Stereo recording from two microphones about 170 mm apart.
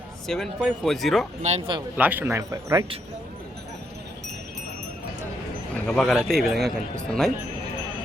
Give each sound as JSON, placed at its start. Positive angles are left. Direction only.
{"t": 0.3, "sound": "a man's voice", "side_deg": 0}
{"t": 1.4, "sound": "speech", "side_deg": -40}
{"t": 2.0, "sound": "speech", "side_deg": -10}
{"t": 5.7, "sound": "a man's voice", "side_deg": 5}